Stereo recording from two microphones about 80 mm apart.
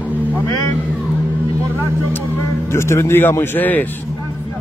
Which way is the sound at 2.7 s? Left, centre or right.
Left.